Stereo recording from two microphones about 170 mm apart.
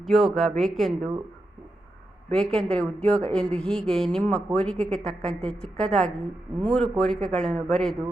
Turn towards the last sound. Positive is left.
turn(degrees=5)  # may be behind; listen again after turning